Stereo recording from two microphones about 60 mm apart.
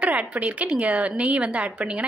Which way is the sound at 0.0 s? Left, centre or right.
Right.